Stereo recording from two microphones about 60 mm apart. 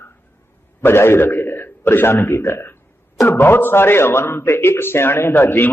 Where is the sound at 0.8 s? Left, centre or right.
Left.